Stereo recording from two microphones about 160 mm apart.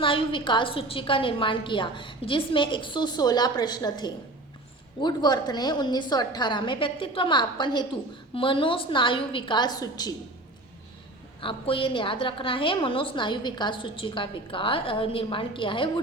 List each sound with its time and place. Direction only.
0.0 s a woman's voice: 35° left (ahead or behind)
11.3 s a woman's voice: 35° left (ahead or behind)